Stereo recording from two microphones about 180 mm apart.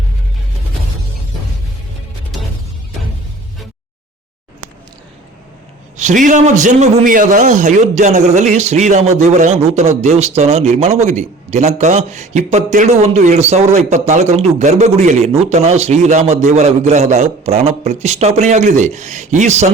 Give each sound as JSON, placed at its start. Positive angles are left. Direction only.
{"t": 6.0, "sound": "a man's voice", "side_deg": -45}